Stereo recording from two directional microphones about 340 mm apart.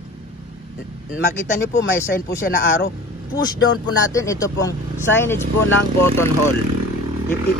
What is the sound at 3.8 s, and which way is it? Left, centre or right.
Speech, centre.